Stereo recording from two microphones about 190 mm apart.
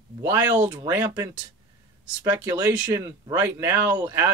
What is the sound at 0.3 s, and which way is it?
Speech, 10° right (ahead or behind).